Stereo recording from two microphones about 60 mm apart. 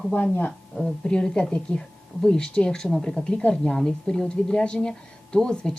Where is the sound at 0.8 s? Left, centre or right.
Centre.